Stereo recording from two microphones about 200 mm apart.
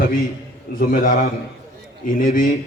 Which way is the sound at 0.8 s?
40° left (ahead or behind).